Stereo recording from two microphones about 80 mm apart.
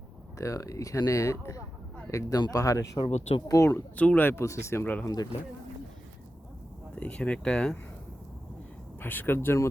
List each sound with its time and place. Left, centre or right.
0.3 s speech: left
3.9 s speech: centre
4.3 s speech: left
5.0 s speech: left
6.9 s speech: centre
9.0 s speech: left